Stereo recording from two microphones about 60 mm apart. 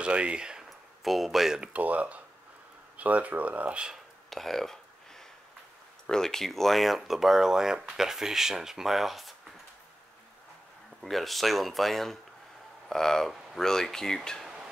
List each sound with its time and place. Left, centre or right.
0.0 s speech: centre
0.7 s a sound: centre
1.6 s speech: right
4.3 s a sound: centre
6.0 s speech: centre
11.0 s speech: centre